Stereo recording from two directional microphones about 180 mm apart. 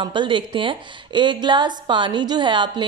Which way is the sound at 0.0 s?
25° right (ahead or behind).